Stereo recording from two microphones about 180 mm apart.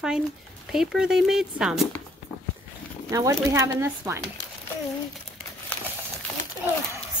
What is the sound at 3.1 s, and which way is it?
Speech, 15° right (ahead or behind).